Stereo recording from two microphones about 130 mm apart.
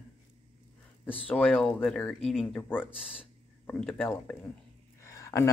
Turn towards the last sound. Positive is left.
turn(degrees=25)  # may be behind; listen again after turning